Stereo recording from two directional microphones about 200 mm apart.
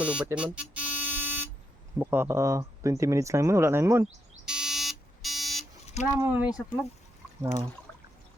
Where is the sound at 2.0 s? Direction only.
10° right (ahead or behind).